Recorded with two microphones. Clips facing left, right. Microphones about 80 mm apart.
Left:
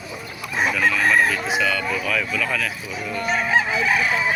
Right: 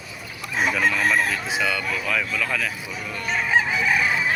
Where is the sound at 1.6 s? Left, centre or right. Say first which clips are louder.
Left 1 dB; right.